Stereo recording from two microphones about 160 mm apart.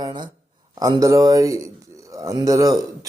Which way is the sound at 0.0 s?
25° right (ahead or behind).